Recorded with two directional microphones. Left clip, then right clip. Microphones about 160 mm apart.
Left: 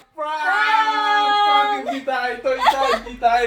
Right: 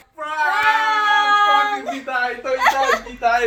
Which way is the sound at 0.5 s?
5° right (ahead or behind).